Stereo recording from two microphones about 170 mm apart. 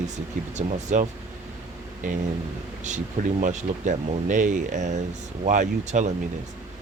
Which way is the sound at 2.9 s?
45° right (ahead or behind).